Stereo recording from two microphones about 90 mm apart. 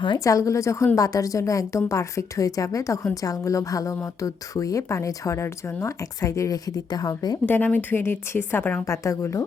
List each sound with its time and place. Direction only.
0.3 s speech: 35° left (ahead or behind)
7.4 s a woman's voice: 20° left (ahead or behind)
8.8 s speech: 35° left (ahead or behind)